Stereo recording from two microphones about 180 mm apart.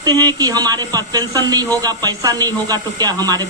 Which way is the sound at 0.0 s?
25° right (ahead or behind).